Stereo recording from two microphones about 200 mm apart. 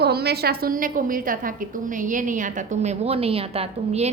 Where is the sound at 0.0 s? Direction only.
55° right (ahead or behind).